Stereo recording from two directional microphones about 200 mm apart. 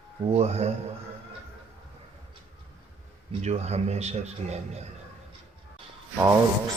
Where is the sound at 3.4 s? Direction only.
35° right (ahead or behind).